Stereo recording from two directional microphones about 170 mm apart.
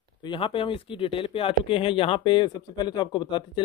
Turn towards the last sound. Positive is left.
turn(degrees=25)  # may be behind; listen again after turning